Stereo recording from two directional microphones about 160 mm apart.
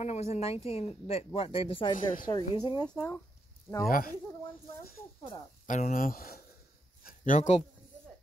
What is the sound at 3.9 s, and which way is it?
Speech, 60° left (ahead or behind).